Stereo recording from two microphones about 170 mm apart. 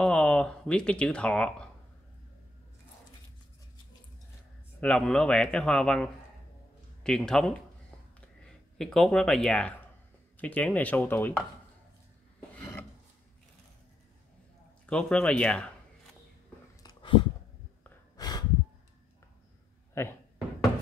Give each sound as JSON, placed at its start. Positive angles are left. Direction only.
{"t": 0.0, "sound": "speech", "side_deg": 5}
{"t": 4.7, "sound": "speech", "side_deg": 5}
{"t": 12.4, "sound": "filing", "side_deg": 10}
{"t": 14.9, "sound": "speech", "side_deg": 5}
{"t": 16.8, "sound": "a sound", "side_deg": 30}
{"t": 18.1, "sound": "snort", "side_deg": 20}
{"t": 19.9, "sound": "speech", "side_deg": 15}